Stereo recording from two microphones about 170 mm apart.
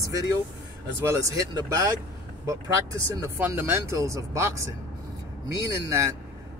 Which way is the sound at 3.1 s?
15° right (ahead or behind).